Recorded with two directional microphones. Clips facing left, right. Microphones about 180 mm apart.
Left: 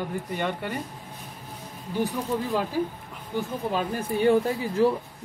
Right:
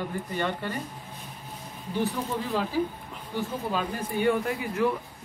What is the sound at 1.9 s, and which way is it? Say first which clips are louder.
Speech: left 2 dB; 15° left (ahead or behind).